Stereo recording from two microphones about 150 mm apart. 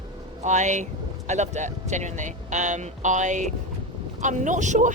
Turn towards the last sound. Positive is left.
turn(degrees=-55)  # may be behind; listen again after turning